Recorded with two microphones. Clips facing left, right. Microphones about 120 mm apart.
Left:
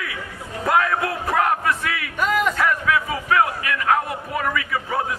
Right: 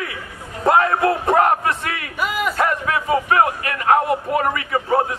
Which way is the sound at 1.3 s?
40° right (ahead or behind).